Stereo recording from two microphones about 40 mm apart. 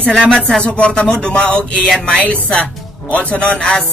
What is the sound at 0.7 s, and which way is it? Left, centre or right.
Speech, left.